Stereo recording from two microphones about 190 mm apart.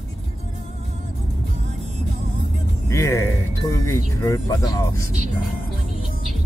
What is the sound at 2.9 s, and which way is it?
Music, 15° left (ahead or behind).